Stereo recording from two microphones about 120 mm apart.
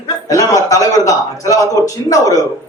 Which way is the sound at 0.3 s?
30° left (ahead or behind).